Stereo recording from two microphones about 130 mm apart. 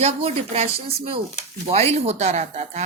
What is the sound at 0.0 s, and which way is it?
A woman's voice, 55° right (ahead or behind).